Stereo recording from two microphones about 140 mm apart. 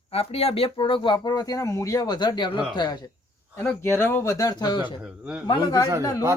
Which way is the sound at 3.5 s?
15° left (ahead or behind).